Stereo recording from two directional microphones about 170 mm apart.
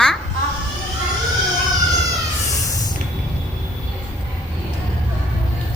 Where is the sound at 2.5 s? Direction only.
20° left (ahead or behind).